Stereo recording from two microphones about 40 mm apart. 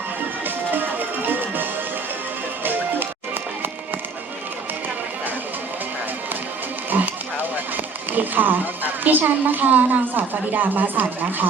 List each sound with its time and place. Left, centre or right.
0.4 s music: right
6.9 s a sound: right
8.1 s a woman's voice: right